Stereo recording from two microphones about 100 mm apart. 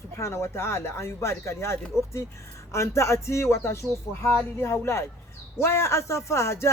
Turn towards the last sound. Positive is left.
turn(degrees=25)  # may be behind; listen again after turning